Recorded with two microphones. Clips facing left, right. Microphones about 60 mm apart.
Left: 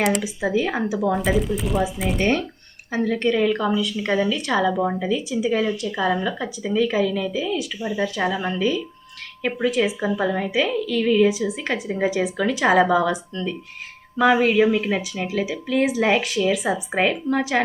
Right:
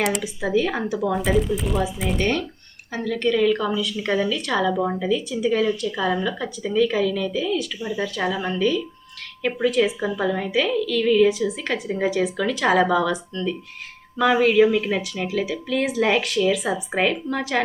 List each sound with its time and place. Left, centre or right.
0.0 s speech: centre
2.9 s a woman's voice: left
4.0 s speech: centre